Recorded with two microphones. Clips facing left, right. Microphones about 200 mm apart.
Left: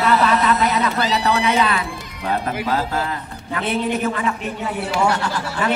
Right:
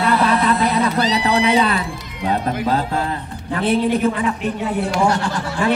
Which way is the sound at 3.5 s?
30° right (ahead or behind).